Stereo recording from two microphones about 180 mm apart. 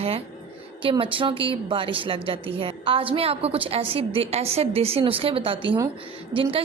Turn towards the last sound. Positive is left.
turn(degrees=-30)  # may be behind; listen again after turning